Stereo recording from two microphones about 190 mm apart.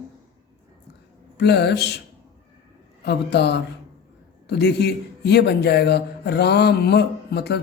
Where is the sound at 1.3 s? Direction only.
60° left (ahead or behind).